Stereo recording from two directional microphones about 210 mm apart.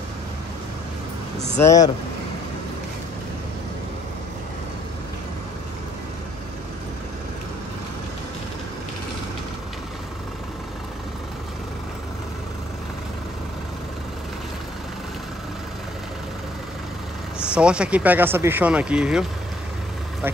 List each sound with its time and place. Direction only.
1.6 s speech: 15° left (ahead or behind)
17.6 s speech: 5° right (ahead or behind)